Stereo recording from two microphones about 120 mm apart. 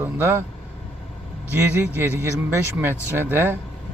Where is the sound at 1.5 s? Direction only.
15° right (ahead or behind).